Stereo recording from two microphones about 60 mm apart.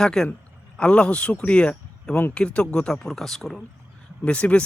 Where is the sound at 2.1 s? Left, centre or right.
Left.